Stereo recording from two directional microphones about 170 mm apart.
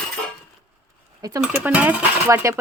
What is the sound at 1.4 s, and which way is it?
Speech, 10° right (ahead or behind).